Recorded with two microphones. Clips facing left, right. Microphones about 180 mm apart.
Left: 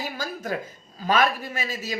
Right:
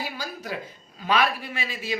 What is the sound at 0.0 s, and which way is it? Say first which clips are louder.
Speech: left 2 dB; 45° left (ahead or behind).